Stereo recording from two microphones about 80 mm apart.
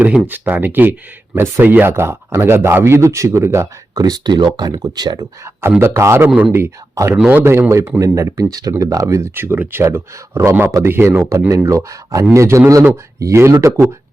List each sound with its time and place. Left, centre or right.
0.0 s speech: right
3.9 s speech: right
5.8 s speech: right
6.2 s speech: right
6.9 s speech: right
9.3 s speech: right
11.3 s speech: right